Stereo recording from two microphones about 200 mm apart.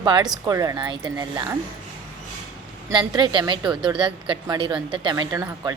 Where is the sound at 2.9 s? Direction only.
25° right (ahead or behind).